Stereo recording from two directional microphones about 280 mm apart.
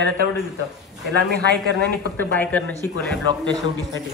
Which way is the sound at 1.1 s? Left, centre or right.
Right.